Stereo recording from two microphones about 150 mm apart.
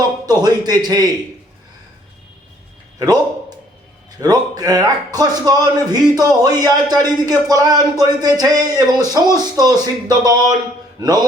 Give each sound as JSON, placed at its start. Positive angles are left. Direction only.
{"t": 0.3, "sound": "a man's voice", "side_deg": -25}
{"t": 4.2, "sound": "speech", "side_deg": -25}